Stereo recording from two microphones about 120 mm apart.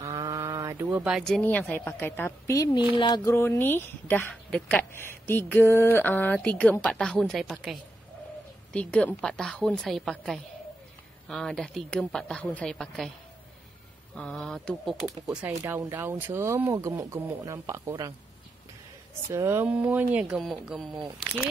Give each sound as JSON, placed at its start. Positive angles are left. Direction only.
{"t": 0.0, "sound": "mantra", "side_deg": -30}
{"t": 1.1, "sound": "a woman's voice", "side_deg": 0}
{"t": 1.4, "sound": "speech", "side_deg": 15}
{"t": 2.7, "sound": "speech", "side_deg": 40}
{"t": 3.3, "sound": "speech", "side_deg": 20}
{"t": 4.9, "sound": "a woman's voice", "side_deg": 20}
{"t": 8.7, "sound": "a woman's voice", "side_deg": 10}
{"t": 14.1, "sound": "a woman's voice", "side_deg": 5}
{"t": 15.4, "sound": "speech", "side_deg": -15}
{"t": 19.3, "sound": "a woman's voice", "side_deg": -20}